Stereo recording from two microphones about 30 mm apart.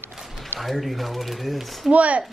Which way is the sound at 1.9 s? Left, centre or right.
Right.